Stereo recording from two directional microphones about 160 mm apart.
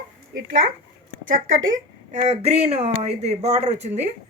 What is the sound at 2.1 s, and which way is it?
A woman's voice, 45° right (ahead or behind).